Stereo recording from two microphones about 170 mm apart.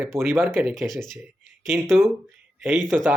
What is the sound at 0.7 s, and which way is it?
Speech, centre (ahead or behind).